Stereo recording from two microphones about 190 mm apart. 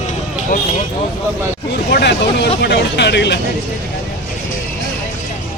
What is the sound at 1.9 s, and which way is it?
Speech, 65° left (ahead or behind).